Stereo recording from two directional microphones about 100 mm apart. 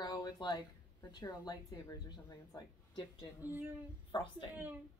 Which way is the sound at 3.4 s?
20° right (ahead or behind).